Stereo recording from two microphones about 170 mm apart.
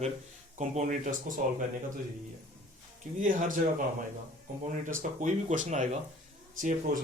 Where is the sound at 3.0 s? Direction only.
50° right (ahead or behind).